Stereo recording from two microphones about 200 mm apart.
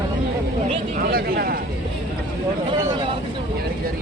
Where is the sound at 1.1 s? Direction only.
50° right (ahead or behind).